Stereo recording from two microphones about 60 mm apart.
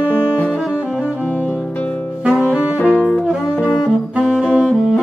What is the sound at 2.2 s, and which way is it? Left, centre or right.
Saxophone, centre.